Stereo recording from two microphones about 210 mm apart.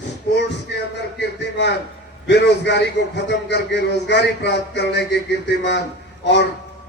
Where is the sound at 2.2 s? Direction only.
55° left (ahead or behind).